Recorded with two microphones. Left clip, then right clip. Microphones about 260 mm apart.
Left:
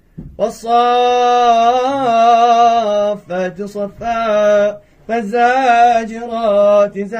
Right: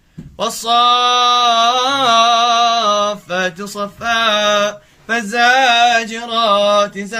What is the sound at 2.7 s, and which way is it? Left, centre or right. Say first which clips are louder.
Mantra: even; right.